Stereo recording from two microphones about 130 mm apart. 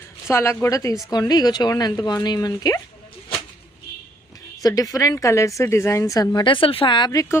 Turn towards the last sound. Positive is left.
turn(degrees=25)  # may be behind; listen again after turning